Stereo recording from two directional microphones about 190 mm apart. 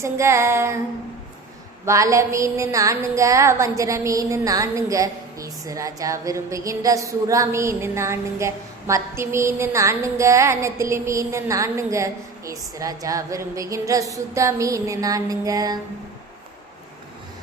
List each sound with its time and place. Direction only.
0.0 s a woman's voice: 15° right (ahead or behind)
1.8 s a woman's voice: 15° right (ahead or behind)